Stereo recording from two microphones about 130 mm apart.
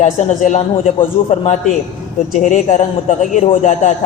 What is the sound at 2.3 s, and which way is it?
A man's voice, 70° left (ahead or behind).